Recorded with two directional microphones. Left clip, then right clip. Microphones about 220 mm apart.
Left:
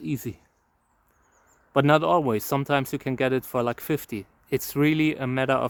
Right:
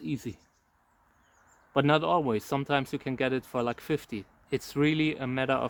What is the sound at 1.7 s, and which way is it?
Speech, 45° left (ahead or behind).